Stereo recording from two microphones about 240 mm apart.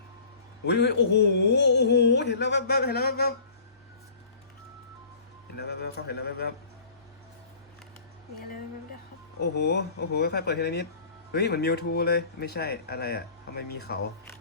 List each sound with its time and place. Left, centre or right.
0.6 s speech: left
5.5 s speech: left
9.4 s speech: left